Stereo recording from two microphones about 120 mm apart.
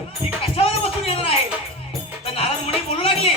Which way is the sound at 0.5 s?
55° left (ahead or behind).